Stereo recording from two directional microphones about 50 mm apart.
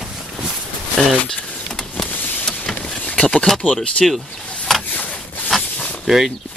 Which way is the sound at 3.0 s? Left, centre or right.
Left.